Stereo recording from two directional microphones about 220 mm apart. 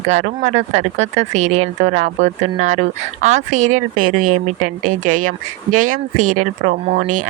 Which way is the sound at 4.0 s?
80° right.